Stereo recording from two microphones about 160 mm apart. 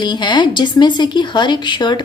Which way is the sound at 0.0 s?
30° left (ahead or behind).